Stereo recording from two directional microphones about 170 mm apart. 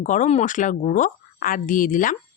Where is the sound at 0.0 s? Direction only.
50° left (ahead or behind).